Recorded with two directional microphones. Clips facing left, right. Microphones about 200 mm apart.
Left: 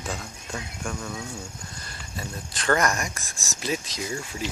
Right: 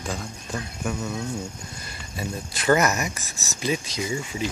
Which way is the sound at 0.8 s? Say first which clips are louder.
Right 6 dB; 5° right (ahead or behind).